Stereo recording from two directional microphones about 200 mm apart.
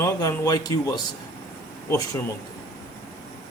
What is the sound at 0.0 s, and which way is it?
Speech, 15° left (ahead or behind).